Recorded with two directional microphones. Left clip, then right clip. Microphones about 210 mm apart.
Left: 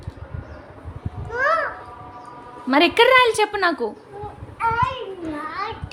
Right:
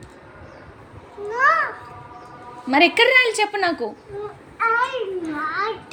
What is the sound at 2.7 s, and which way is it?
Speech, 60° left (ahead or behind).